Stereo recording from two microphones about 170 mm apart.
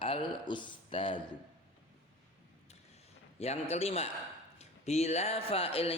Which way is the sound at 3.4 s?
40° left (ahead or behind).